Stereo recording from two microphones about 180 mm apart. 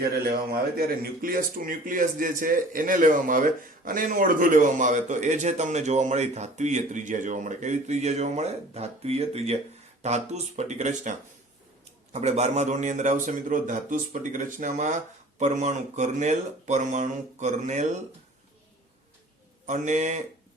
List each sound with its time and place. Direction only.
0.0 s a man's voice: 55° right (ahead or behind); by 11.1 s 40° right (ahead or behind)
12.1 s a man's voice: 40° right (ahead or behind)
19.6 s a man's voice: 45° right (ahead or behind)